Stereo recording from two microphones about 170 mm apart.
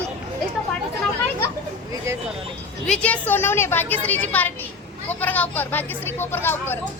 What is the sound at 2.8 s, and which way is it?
Speech, 5° left (ahead or behind).